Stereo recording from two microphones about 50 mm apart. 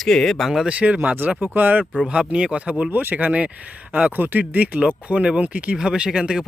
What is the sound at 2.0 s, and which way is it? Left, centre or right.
Speech, right.